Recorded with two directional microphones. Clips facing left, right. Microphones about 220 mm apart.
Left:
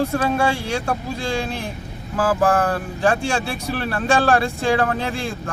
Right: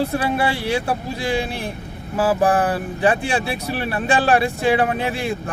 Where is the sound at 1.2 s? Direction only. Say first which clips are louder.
Right 2 dB; 15° right (ahead or behind).